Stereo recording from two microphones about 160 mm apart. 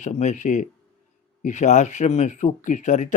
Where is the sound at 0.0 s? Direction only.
45° left (ahead or behind).